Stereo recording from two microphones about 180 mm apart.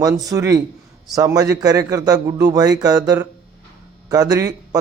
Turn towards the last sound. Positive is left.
turn(degrees=-20)  # may be behind; listen again after turning